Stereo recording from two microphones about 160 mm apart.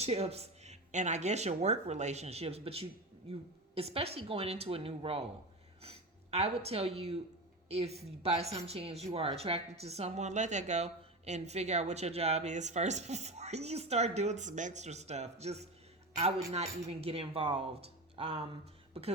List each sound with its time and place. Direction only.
0.0 s a woman's voice: 40° right (ahead or behind)
6.3 s a woman's voice: 40° right (ahead or behind)